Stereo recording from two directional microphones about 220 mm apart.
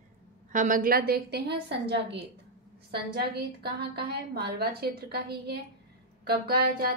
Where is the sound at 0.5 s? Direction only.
35° right (ahead or behind).